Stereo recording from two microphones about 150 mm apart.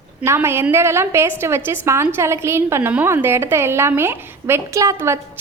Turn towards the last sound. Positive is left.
turn(degrees=-20)  # may be behind; listen again after turning